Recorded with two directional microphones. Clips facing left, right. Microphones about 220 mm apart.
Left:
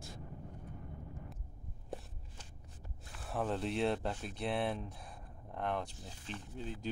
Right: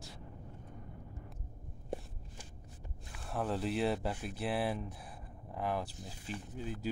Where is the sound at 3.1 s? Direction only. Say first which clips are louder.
Even; centre (ahead or behind).